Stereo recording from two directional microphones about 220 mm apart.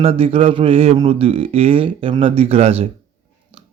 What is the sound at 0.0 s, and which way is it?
A man's voice, 25° right (ahead or behind).